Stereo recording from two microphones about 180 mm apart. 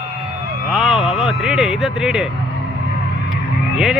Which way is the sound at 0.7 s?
5° right (ahead or behind).